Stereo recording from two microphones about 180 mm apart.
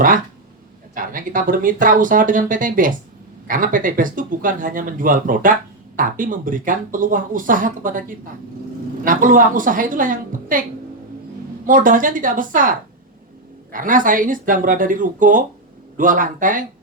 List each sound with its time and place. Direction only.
0.9 s speech: 50° right (ahead or behind)
11.6 s speech: 50° right (ahead or behind)